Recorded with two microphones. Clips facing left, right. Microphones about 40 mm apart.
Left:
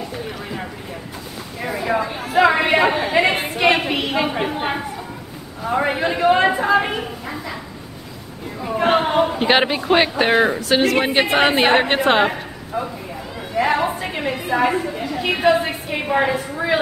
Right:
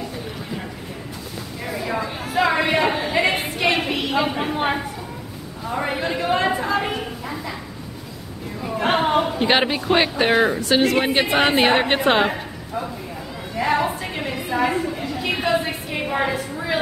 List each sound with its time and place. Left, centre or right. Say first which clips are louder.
1.6 s a sound: left 5 dB; centre
5.6 s a woman's voice: left 5 dB; centre
8.8 s a woman's voice: left 2 dB; centre